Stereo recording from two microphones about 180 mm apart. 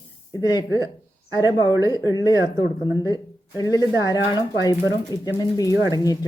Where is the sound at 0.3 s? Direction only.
20° left (ahead or behind).